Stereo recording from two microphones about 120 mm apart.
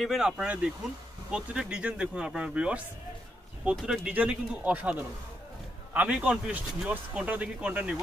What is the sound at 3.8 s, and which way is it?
Speech, 10° right (ahead or behind).